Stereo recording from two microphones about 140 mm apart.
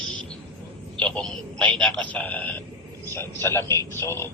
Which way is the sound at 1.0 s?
10° left (ahead or behind).